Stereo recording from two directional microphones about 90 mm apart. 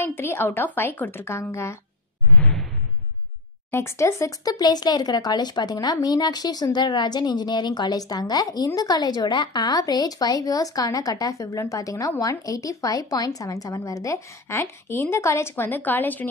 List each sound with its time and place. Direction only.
0.0 s a woman's voice: 25° left (ahead or behind)
2.3 s whoosh: 10° left (ahead or behind)
3.7 s a woman's voice: 30° left (ahead or behind)